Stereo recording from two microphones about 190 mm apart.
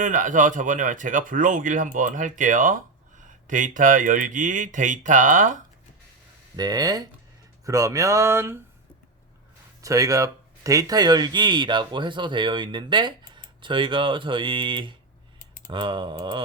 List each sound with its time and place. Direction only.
0.0 s speech: 45° right (ahead or behind)
6.6 s speech: 20° right (ahead or behind)
9.8 s speech: 15° right (ahead or behind)